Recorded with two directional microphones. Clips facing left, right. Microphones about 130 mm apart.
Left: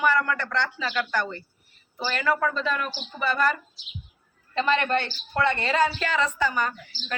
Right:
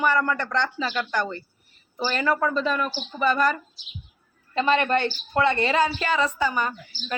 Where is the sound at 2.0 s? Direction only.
35° right (ahead or behind).